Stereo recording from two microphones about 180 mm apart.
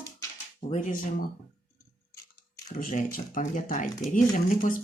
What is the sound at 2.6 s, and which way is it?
Speech, 45° left (ahead or behind).